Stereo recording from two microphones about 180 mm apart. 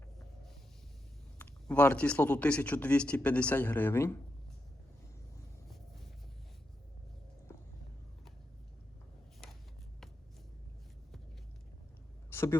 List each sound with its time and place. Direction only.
1.4 s a man's voice: 10° left (ahead or behind)
5.6 s vehicle: centre (ahead or behind)
12.3 s a sound: 15° left (ahead or behind)